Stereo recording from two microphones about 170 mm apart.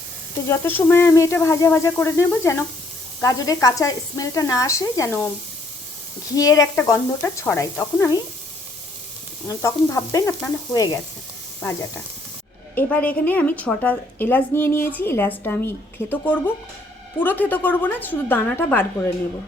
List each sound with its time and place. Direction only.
0.4 s a woman's voice: 15° left (ahead or behind)
6.3 s a woman's voice: 20° left (ahead or behind)
9.5 s speech: 15° left (ahead or behind)
12.7 s a woman's voice: 10° left (ahead or behind)